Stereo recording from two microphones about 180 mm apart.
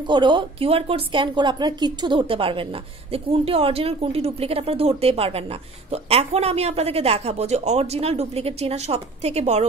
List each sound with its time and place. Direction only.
0.0 s speech: 25° right (ahead or behind)